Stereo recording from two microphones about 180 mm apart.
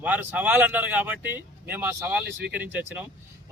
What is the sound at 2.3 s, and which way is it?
Speech, 70° right (ahead or behind).